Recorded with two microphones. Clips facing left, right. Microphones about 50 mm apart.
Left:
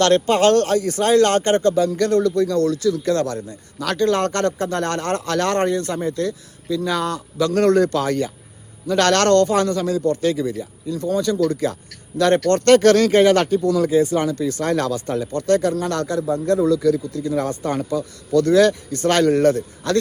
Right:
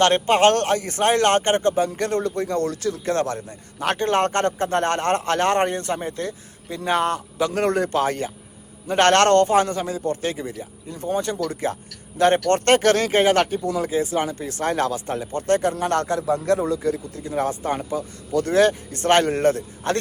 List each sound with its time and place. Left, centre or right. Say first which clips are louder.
0.0 s a man's voice: left 1 dB; right
7.4 s speech: left 6 dB; centre; by 16.6 s right
16.6 s speech: left 6 dB; right